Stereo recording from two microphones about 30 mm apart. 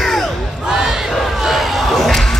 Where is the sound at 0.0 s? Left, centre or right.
Centre.